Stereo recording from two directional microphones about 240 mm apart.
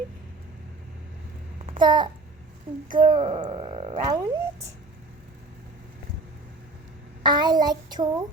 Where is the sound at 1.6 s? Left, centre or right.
Right.